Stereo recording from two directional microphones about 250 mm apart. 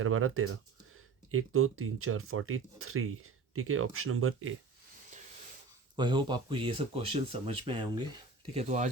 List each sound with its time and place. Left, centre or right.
0.0 s speech: right
6.0 s speech: centre